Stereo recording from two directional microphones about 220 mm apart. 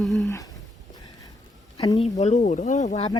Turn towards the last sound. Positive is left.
turn(degrees=30)  # may be behind; listen again after turning